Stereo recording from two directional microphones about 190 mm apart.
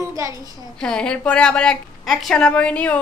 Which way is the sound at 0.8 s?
5° left (ahead or behind).